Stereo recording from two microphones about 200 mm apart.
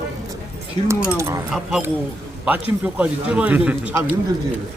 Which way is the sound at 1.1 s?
15° right (ahead or behind).